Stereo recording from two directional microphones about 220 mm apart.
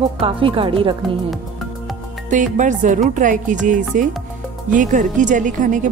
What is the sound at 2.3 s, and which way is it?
Speech, 35° right (ahead or behind).